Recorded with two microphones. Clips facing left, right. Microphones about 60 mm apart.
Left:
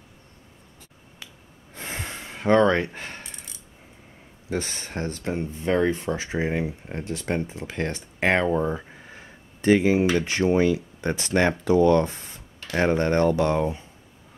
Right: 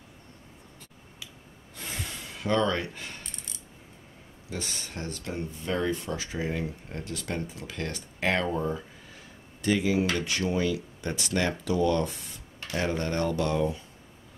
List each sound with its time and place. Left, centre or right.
1.8 s gasp: left
4.5 s speech: left